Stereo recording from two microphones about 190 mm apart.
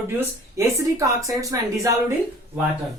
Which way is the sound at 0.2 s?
15° right (ahead or behind).